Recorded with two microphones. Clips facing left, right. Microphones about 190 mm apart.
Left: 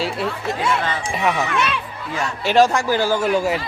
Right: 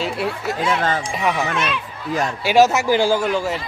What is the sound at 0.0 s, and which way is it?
Speech, centre (ahead or behind).